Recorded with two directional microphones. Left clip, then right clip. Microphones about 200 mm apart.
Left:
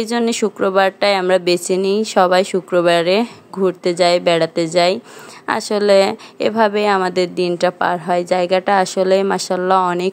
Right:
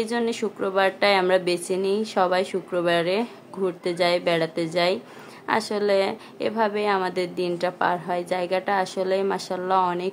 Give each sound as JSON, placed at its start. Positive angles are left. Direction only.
{"t": 0.0, "sound": "a woman's voice", "side_deg": 35}